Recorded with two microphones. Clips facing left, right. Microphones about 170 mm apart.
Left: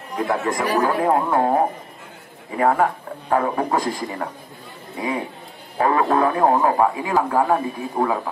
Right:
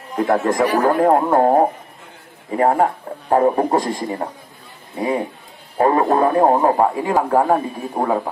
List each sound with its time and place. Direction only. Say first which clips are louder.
0.3 s speech: right 5 dB; 45° right (ahead or behind)
5.8 s speech: right 3 dB; 35° right (ahead or behind)